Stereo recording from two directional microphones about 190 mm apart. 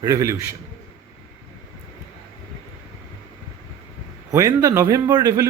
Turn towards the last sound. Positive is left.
turn(degrees=-15)  # may be behind; listen again after turning